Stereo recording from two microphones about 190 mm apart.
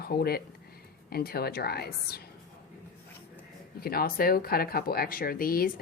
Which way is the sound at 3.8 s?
50° left (ahead or behind).